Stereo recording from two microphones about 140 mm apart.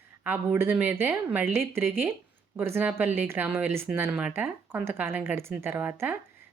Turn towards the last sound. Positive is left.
turn(degrees=-15)  # may be behind; listen again after turning